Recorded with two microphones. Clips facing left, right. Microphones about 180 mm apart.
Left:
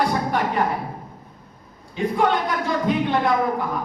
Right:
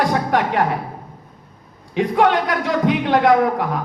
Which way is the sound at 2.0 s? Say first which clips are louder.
Right 4 dB; 90° right.